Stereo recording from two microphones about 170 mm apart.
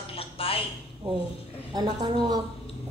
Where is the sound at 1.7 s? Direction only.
25° right (ahead or behind).